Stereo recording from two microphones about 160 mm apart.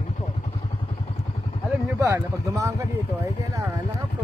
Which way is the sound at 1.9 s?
20° right (ahead or behind).